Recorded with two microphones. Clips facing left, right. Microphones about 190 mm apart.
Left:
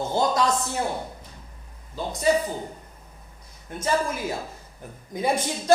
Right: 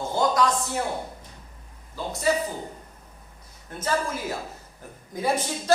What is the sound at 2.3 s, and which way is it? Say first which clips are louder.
Speech: left 3 dB; 20° left (ahead or behind).